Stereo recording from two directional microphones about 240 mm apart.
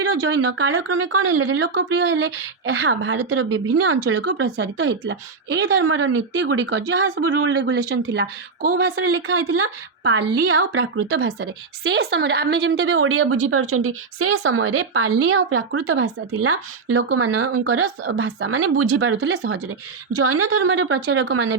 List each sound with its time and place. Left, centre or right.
0.1 s speech: right
9.0 s a woman's voice: right
20.1 s a woman's voice: right